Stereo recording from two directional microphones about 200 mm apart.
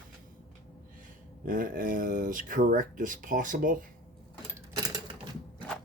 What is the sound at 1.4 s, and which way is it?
Speech, 45° right (ahead or behind).